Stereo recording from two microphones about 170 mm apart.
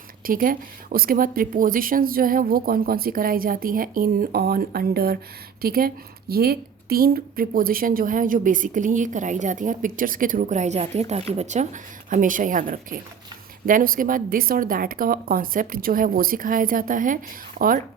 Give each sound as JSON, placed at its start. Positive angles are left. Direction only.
{"t": 0.3, "sound": "a woman's voice", "side_deg": -55}